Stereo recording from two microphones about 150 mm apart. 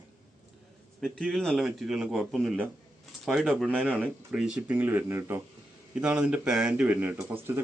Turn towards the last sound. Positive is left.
turn(degrees=-15)  # may be behind; listen again after turning